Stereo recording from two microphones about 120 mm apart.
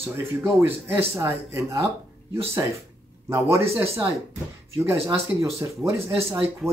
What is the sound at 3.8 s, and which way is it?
Speech, 20° right (ahead or behind).